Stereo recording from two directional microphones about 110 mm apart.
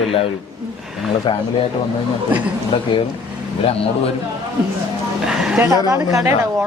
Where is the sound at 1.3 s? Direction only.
45° left (ahead or behind).